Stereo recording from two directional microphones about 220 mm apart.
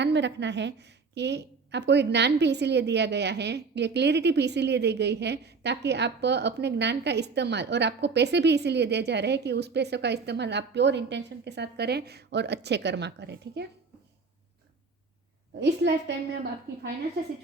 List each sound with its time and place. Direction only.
0.0 s a woman's voice: 50° right (ahead or behind)
15.6 s a woman's voice: 50° right (ahead or behind)